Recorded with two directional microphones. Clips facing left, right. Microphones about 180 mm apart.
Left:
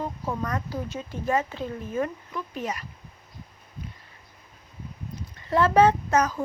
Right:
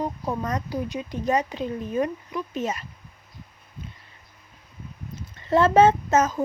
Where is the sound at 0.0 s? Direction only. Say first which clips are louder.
Right 2 dB; 20° right (ahead or behind).